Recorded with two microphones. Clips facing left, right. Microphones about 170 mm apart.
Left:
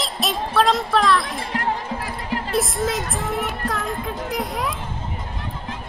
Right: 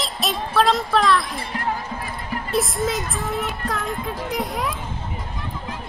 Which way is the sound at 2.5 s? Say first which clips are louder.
Right 1 dB; centre (ahead or behind).